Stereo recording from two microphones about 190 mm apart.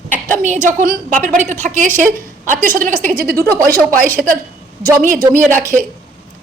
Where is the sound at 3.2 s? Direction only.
50° right (ahead or behind).